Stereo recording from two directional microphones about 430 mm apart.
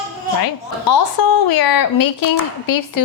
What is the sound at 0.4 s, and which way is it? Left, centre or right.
A woman's voice, left.